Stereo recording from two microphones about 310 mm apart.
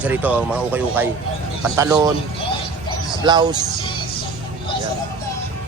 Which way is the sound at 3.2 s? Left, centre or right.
Centre.